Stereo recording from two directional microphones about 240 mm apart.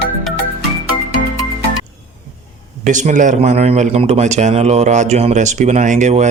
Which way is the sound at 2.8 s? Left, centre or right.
Right.